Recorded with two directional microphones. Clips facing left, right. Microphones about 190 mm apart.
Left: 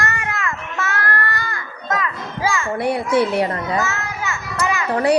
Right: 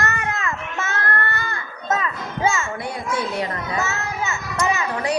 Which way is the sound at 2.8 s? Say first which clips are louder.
Left 8 dB; 70° left (ahead or behind).